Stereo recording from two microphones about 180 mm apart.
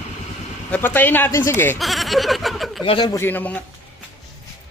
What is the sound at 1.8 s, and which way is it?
Speech, centre (ahead or behind).